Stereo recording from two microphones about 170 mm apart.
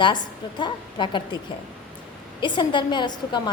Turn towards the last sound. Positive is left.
turn(degrees=25)  # may be behind; listen again after turning